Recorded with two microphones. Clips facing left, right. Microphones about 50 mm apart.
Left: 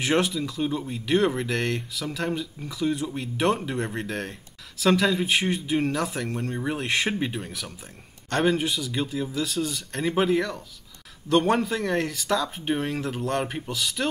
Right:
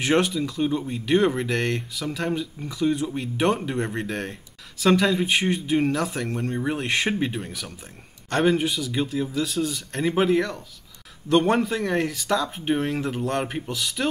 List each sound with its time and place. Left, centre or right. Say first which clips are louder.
0.0 s speech: right 2 dB; centre